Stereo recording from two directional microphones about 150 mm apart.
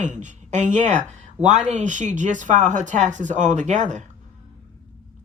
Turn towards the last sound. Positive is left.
turn(degrees=-55)  # may be behind; listen again after turning